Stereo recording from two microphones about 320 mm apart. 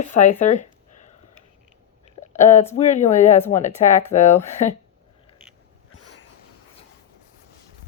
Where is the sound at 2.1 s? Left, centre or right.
Left.